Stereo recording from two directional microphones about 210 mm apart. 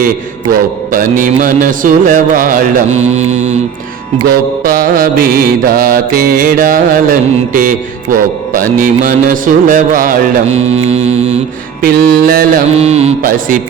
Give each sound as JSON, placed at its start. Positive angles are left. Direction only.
{"t": 0.9, "sound": "speech", "side_deg": -40}
{"t": 4.3, "sound": "mantra", "side_deg": -40}
{"t": 8.5, "sound": "speech", "side_deg": -45}
{"t": 11.8, "sound": "mantra", "side_deg": -45}
{"t": 12.7, "sound": "speech", "side_deg": -30}